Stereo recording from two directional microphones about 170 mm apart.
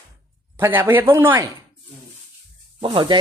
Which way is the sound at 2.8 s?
25° right (ahead or behind).